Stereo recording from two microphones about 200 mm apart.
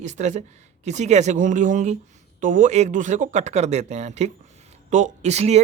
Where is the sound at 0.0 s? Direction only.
35° right (ahead or behind).